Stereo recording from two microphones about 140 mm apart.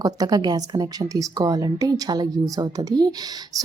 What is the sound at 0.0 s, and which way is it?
A woman's voice, 25° right (ahead or behind).